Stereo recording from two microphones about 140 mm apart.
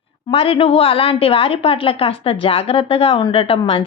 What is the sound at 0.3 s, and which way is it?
A woman's voice, 40° left (ahead or behind).